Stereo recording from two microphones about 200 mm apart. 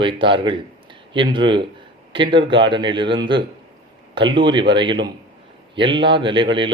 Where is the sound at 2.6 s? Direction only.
25° right (ahead or behind).